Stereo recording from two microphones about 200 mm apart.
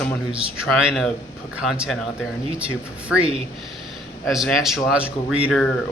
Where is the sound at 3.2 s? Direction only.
30° right (ahead or behind).